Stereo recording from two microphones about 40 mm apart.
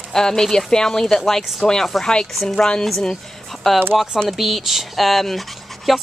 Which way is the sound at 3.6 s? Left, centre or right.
Centre.